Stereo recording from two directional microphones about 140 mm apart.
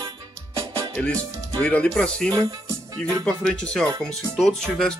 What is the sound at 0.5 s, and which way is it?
Music, 25° right (ahead or behind).